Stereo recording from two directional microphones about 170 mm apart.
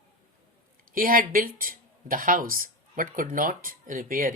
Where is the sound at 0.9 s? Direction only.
55° right (ahead or behind).